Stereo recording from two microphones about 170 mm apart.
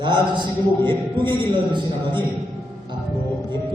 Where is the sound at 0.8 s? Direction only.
25° right (ahead or behind).